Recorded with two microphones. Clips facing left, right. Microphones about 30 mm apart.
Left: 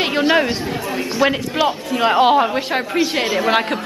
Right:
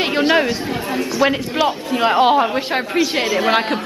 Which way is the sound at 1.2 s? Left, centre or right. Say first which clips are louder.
Even; centre.